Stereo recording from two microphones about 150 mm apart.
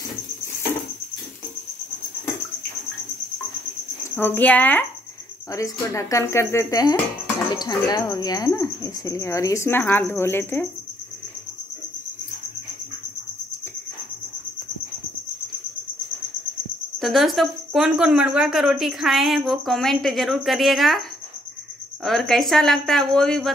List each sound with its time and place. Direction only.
4.1 s speech: 10° left (ahead or behind)
17.0 s speech: centre (ahead or behind)
22.0 s speech: centre (ahead or behind)